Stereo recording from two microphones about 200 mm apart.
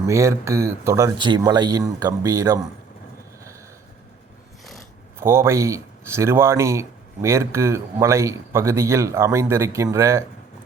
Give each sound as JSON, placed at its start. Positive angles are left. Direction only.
{"t": 0.0, "sound": "speech", "side_deg": -15}
{"t": 5.2, "sound": "speech", "side_deg": -15}